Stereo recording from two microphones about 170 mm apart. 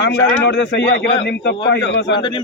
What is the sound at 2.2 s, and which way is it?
Speech, 30° left (ahead or behind).